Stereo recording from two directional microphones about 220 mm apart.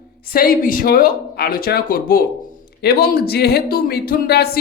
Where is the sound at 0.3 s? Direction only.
40° left (ahead or behind).